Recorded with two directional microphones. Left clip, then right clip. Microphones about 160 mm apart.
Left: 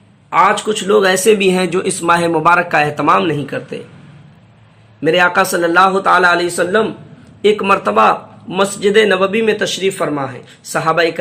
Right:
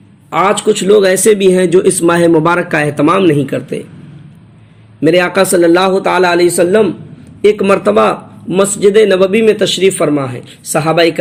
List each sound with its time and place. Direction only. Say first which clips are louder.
0.3 s a man's voice: right 1 dB; 30° right (ahead or behind)
4.9 s a man's voice: right 2 dB; 25° right (ahead or behind)